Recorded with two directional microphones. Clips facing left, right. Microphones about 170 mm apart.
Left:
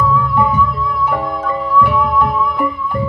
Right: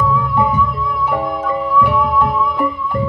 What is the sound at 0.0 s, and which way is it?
Music, 20° right (ahead or behind).